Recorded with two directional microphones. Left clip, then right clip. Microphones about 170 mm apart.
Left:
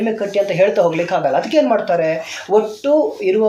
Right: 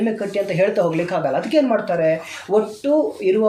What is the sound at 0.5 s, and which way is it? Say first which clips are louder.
Speech: left 3 dB; 15° right (ahead or behind).